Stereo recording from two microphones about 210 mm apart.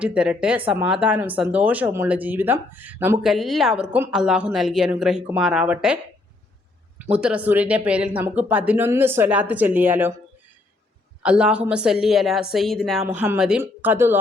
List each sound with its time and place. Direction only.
0.0 s a woman's voice: 5° right (ahead or behind)
7.0 s speech: 5° right (ahead or behind)
11.2 s a woman's voice: 5° right (ahead or behind)
13.1 s speech: 10° right (ahead or behind)